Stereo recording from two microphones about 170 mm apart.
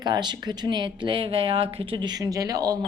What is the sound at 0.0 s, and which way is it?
Speech, 25° right (ahead or behind).